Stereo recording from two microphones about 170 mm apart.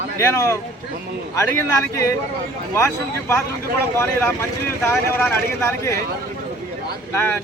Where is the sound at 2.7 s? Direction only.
15° left (ahead or behind).